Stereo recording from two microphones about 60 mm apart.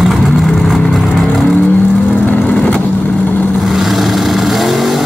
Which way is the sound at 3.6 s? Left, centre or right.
Centre.